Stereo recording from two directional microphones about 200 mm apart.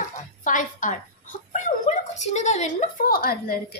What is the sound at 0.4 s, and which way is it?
A woman's voice, 40° left (ahead or behind).